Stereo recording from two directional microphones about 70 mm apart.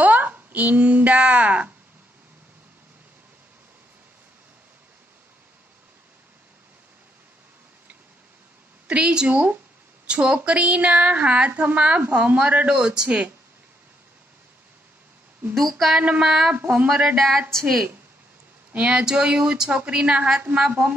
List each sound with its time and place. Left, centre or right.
0.0 s speech: right
8.8 s speech: centre
15.5 s a sound: centre
16.0 s speech: centre
16.5 s speech: right
17.0 s a sound: centre
18.7 s speech: centre